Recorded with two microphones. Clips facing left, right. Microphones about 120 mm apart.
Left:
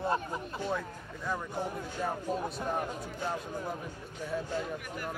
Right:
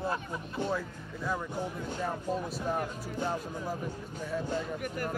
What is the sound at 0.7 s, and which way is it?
Speech, 5° right (ahead or behind).